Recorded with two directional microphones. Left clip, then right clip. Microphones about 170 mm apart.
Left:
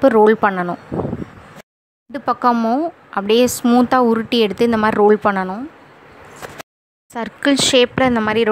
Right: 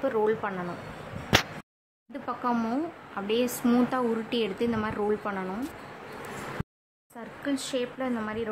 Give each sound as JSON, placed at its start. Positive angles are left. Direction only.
{"t": 0.0, "sound": "a woman's voice", "side_deg": 50}
{"t": 2.2, "sound": "a woman's voice", "side_deg": 45}
{"t": 7.2, "sound": "speech", "side_deg": 55}